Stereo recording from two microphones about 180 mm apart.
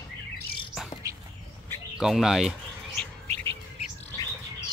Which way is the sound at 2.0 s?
5° right (ahead or behind).